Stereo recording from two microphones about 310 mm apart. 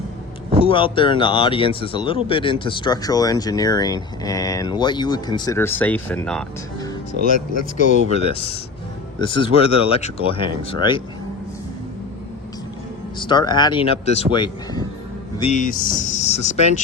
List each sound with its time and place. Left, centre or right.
0.6 s speech: centre
7.8 s speech: left
13.1 s speech: centre